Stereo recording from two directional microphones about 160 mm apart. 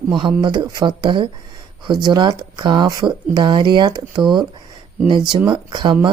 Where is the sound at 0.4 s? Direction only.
25° right (ahead or behind).